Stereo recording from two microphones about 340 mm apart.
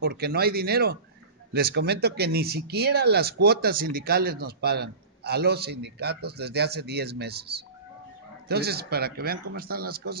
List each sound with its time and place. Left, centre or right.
0.0 s a man's voice: right